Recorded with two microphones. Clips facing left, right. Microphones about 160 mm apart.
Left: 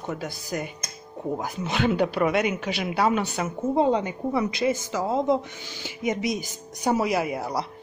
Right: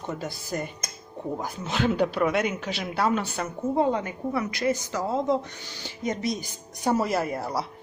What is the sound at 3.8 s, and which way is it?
A woman's voice, 20° left (ahead or behind).